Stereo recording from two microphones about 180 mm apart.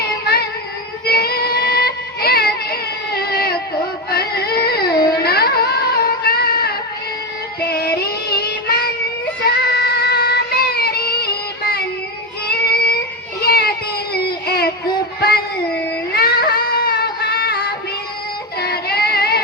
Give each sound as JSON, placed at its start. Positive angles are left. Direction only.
{"t": 0.0, "sound": "child singing", "side_deg": 60}
{"t": 4.1, "sound": "a sound", "side_deg": 60}
{"t": 5.2, "sound": "music", "side_deg": 60}
{"t": 8.0, "sound": "child singing", "side_deg": 60}
{"t": 12.5, "sound": "yodeling", "side_deg": 60}
{"t": 13.4, "sound": "child singing", "side_deg": 60}
{"t": 14.4, "sound": "a sound", "side_deg": 60}
{"t": 16.1, "sound": "child singing", "side_deg": 60}